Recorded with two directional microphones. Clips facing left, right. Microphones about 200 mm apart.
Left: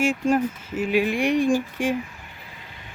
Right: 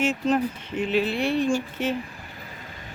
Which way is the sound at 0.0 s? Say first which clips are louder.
Left 2 dB; 10° left (ahead or behind).